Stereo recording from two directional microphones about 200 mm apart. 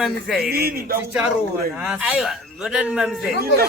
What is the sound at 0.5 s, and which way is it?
Speech, 50° right (ahead or behind).